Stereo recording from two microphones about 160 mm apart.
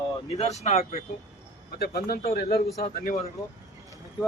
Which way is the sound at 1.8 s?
70° left (ahead or behind).